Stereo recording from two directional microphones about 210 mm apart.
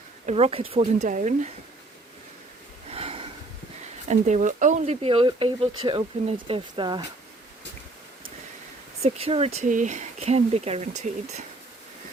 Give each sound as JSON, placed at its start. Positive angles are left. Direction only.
{"t": 0.3, "sound": "speech", "side_deg": -30}
{"t": 2.9, "sound": "sniff", "side_deg": -25}
{"t": 4.1, "sound": "speech", "side_deg": -35}
{"t": 9.0, "sound": "speech", "side_deg": -30}